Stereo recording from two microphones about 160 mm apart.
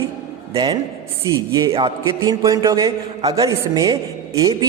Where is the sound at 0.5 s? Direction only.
35° right (ahead or behind).